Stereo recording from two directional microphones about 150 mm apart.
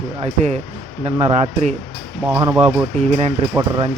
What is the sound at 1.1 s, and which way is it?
Speech, 45° right (ahead or behind).